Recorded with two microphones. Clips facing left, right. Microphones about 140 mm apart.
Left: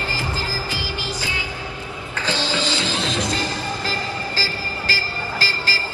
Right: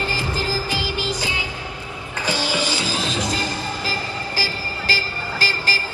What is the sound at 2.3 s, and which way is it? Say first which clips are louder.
Music: even; 10° right (ahead or behind).